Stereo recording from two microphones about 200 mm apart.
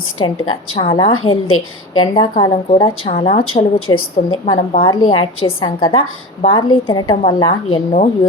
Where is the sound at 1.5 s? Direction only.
90° left.